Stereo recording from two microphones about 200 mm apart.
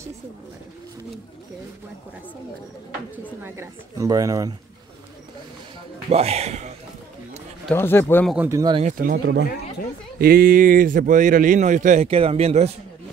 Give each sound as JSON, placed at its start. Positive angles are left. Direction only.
{"t": 3.4, "sound": "speech", "side_deg": -15}
{"t": 6.0, "sound": "a man's voice", "side_deg": -30}
{"t": 7.7, "sound": "speech", "side_deg": 10}
{"t": 8.5, "sound": "speech", "side_deg": -20}
{"t": 8.8, "sound": "a man's voice", "side_deg": -45}